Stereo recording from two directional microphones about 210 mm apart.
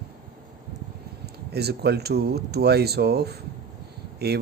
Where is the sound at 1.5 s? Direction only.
50° right (ahead or behind).